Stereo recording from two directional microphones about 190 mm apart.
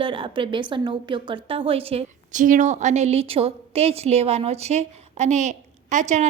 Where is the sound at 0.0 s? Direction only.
25° right (ahead or behind).